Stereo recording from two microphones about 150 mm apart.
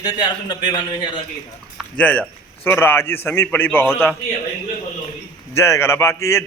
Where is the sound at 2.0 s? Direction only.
10° left (ahead or behind).